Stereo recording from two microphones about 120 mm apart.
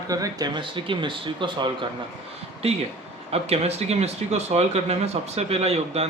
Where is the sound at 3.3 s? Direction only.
60° right (ahead or behind).